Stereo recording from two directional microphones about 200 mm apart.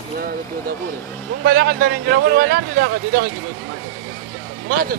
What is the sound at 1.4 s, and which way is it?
Speech, 50° right (ahead or behind).